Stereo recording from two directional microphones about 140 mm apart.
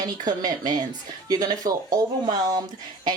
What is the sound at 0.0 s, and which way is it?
A woman's voice, 30° right (ahead or behind).